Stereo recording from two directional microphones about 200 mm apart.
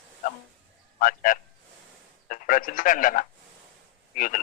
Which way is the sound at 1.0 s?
40° left (ahead or behind).